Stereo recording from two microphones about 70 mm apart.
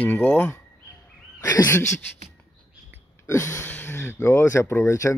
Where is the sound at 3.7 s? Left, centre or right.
Left.